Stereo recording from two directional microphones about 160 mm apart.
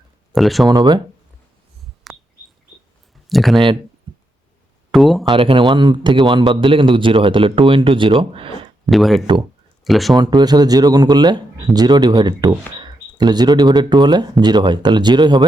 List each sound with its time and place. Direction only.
0.3 s speech: centre (ahead or behind)
0.7 s speech: 25° right (ahead or behind)
2.1 s bird: centre (ahead or behind)
3.2 s speech: centre (ahead or behind)
4.9 s speech: centre (ahead or behind)
5.2 s a man's voice: 30° right (ahead or behind)
8.9 s speech: centre (ahead or behind)
10.2 s speech: 25° right (ahead or behind)